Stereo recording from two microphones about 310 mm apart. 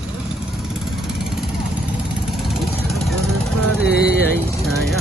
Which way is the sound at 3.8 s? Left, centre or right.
Left.